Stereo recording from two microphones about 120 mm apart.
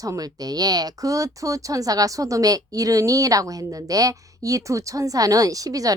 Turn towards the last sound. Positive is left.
turn(degrees=-30)  # may be behind; listen again after turning